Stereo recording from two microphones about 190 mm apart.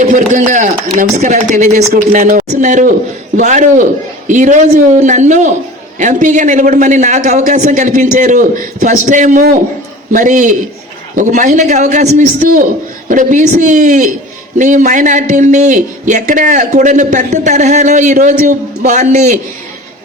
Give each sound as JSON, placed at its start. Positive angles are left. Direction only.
{"t": 0.0, "sound": "a man's voice", "side_deg": -40}